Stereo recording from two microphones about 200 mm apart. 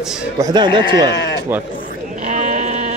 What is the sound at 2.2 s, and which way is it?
Sheep, 40° right (ahead or behind).